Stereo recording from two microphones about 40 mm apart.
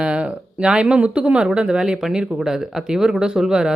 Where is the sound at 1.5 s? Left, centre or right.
Right.